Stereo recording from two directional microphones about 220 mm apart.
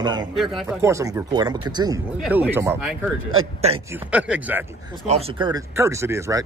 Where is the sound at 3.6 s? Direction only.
30° right (ahead or behind).